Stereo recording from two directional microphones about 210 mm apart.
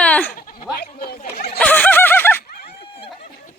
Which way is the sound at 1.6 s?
5° left (ahead or behind).